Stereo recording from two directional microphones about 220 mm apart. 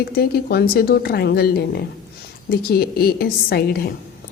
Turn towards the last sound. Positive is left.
turn(degrees=45)  # may be behind; listen again after turning